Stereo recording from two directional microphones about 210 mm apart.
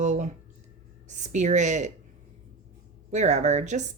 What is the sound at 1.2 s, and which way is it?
Speech, 35° right (ahead or behind).